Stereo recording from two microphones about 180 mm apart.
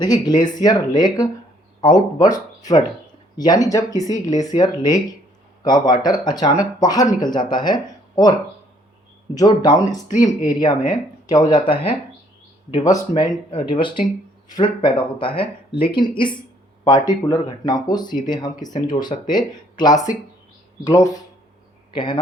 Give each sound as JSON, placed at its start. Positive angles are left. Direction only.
{"t": 0.0, "sound": "speech", "side_deg": 25}